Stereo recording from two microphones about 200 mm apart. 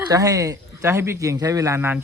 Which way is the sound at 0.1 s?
15° right (ahead or behind).